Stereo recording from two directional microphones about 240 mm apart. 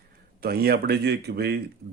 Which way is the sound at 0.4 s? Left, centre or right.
Right.